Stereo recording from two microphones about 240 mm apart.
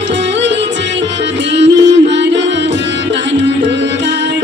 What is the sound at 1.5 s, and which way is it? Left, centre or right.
Music, right.